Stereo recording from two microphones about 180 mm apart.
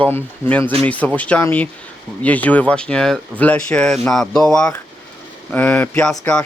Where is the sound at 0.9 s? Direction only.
10° left (ahead or behind).